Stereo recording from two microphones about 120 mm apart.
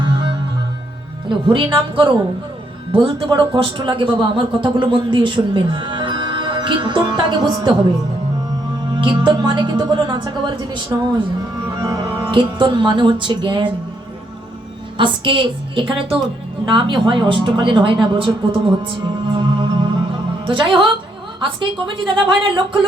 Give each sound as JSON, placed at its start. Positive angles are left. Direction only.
{"t": 0.0, "sound": "music", "side_deg": -45}
{"t": 1.3, "sound": "speech", "side_deg": -45}
{"t": 9.0, "sound": "a woman's voice", "side_deg": -40}
{"t": 12.3, "sound": "speech", "side_deg": -40}
{"t": 14.9, "sound": "speech", "side_deg": -45}